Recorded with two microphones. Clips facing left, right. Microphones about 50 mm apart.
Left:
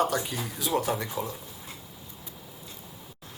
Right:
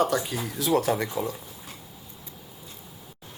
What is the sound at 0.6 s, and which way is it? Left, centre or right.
Speech, right.